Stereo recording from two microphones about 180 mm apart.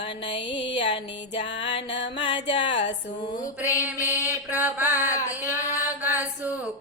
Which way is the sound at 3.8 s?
10° right (ahead or behind).